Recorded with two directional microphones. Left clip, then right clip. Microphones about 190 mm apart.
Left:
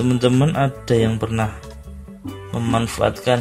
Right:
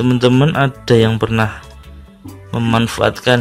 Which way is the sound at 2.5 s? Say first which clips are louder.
Right 5 dB; 30° right (ahead or behind).